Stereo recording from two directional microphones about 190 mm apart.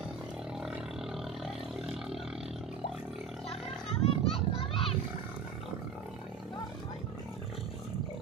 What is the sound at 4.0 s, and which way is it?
Children playing, 30° left (ahead or behind).